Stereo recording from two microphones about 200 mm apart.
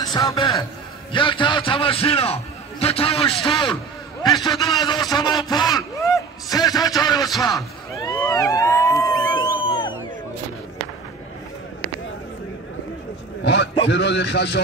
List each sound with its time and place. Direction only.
0.0 s a man's voice: 15° left (ahead or behind)
5.1 s a sound: 20° left (ahead or behind)
7.4 s a man's voice: 20° left (ahead or behind)
9.6 s crowd: 25° left (ahead or behind)
13.4 s a man's voice: 60° left (ahead or behind)